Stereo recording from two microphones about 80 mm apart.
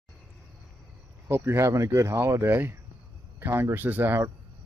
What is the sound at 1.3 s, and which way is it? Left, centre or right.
Speech, right.